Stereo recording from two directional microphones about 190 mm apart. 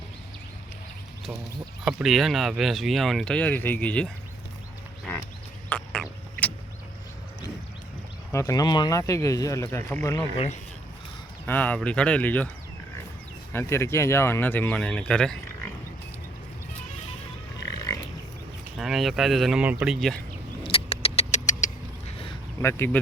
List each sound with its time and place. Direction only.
1.8 s speech: 5° right (ahead or behind)
5.1 s a sound: 10° left (ahead or behind)
5.6 s frog: 5° left (ahead or behind)
8.3 s speech: 15° left (ahead or behind)
10.3 s speech: 35° left (ahead or behind)
11.4 s speech: 10° left (ahead or behind)
13.5 s speech: 10° left (ahead or behind)
17.7 s pig: 20° left (ahead or behind)
18.8 s speech: centre (ahead or behind)
20.7 s vehicle: 30° left (ahead or behind)
22.6 s speech: 10° left (ahead or behind)